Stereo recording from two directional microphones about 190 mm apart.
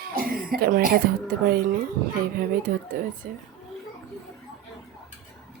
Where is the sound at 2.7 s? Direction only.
45° right (ahead or behind).